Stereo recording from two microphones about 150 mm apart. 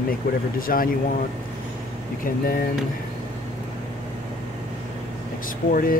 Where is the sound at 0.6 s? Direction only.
70° left (ahead or behind).